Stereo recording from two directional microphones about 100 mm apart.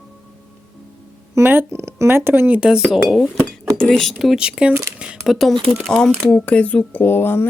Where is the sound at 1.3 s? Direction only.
25° right (ahead or behind).